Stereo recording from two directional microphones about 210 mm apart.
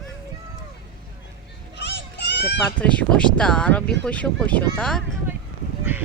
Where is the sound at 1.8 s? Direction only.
55° left (ahead or behind).